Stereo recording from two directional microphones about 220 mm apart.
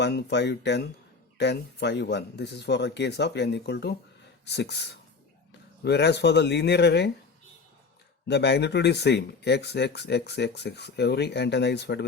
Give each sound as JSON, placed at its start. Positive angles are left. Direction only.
{"t": 0.0, "sound": "speech", "side_deg": 50}
{"t": 8.3, "sound": "speech", "side_deg": 50}